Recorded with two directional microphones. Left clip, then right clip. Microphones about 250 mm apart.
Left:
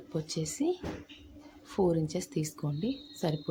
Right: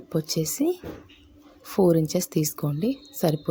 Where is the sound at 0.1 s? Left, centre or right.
Right.